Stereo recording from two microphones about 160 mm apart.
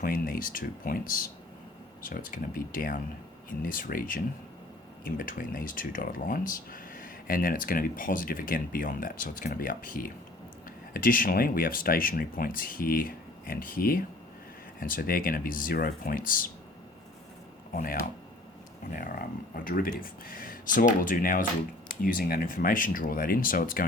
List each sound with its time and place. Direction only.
0.0 s speech: 65° left (ahead or behind)
17.7 s speech: 65° left (ahead or behind)